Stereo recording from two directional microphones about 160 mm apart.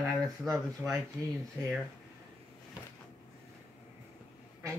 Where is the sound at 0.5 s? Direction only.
Centre (ahead or behind).